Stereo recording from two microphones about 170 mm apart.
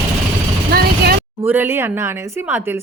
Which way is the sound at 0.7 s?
65° right (ahead or behind).